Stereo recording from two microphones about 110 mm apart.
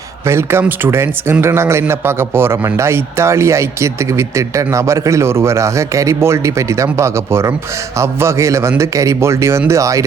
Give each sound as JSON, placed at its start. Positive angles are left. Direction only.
{"t": 0.3, "sound": "a man's voice", "side_deg": -25}